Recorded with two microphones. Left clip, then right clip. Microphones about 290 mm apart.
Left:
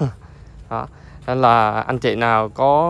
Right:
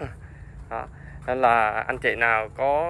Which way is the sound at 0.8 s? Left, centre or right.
Left.